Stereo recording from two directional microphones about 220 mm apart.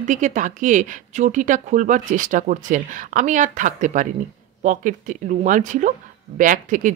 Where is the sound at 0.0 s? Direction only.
35° right (ahead or behind).